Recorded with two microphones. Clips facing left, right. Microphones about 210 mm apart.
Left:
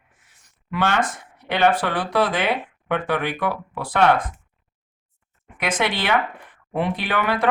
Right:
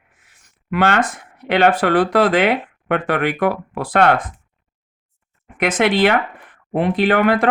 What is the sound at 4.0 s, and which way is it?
Speech, 55° right (ahead or behind).